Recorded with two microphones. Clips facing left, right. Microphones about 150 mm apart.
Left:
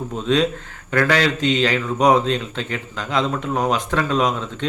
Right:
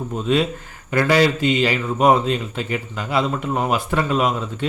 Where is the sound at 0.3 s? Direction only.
5° right (ahead or behind).